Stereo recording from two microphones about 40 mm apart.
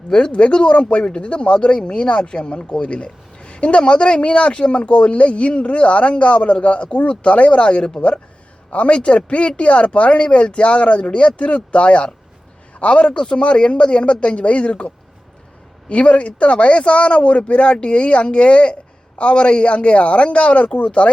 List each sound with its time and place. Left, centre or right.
0.1 s a man's voice: left